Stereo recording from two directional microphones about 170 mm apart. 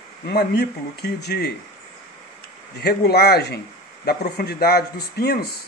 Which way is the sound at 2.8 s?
70° left (ahead or behind).